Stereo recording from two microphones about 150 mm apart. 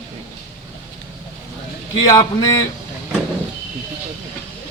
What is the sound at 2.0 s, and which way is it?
Speech, 25° left (ahead or behind).